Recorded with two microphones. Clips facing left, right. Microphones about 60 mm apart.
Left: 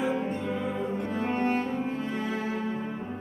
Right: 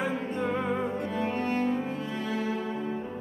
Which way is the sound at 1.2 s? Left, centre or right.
Left.